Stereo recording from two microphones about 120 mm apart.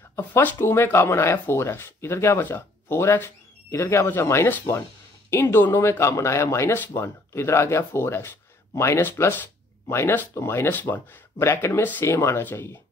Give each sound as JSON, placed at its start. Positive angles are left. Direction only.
{"t": 0.1, "sound": "speech", "side_deg": 20}